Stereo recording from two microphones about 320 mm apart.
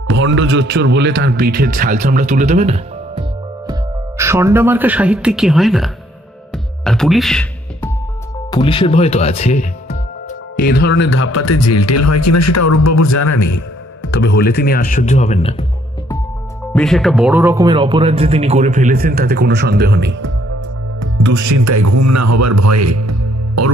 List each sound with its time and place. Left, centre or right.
0.0 s speech: right; by 3.7 s centre
4.2 s speech: centre
6.5 s music: centre
8.5 s a man's voice: centre; by 13.6 s left
14.0 s speech: left
16.7 s speech: centre; by 20.2 s right
21.4 s speech: right